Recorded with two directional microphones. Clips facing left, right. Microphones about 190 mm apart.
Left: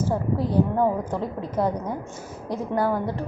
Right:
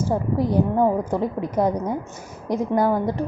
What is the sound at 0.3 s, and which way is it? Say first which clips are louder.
A woman's voice: right 3 dB; 15° right (ahead or behind).